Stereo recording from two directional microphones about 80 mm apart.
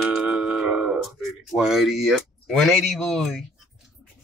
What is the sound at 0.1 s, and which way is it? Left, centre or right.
Music, centre.